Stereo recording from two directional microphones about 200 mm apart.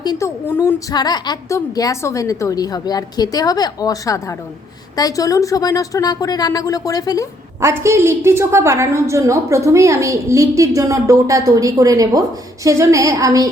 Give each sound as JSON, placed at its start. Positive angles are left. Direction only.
{"t": 0.0, "sound": "a woman's voice", "side_deg": 15}
{"t": 7.6, "sound": "a woman's voice", "side_deg": -15}